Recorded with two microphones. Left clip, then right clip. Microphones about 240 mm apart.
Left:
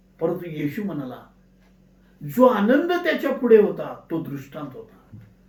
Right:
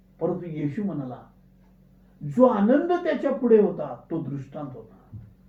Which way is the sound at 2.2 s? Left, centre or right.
Left.